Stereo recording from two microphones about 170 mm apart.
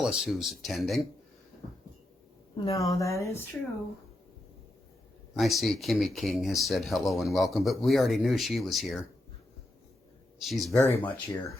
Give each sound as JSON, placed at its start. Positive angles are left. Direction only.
{"t": 0.0, "sound": "speech", "side_deg": 0}
{"t": 2.7, "sound": "a woman's voice", "side_deg": 20}
{"t": 5.4, "sound": "speech", "side_deg": 0}
{"t": 10.4, "sound": "speech", "side_deg": 0}
{"t": 10.8, "sound": "a woman's voice", "side_deg": 10}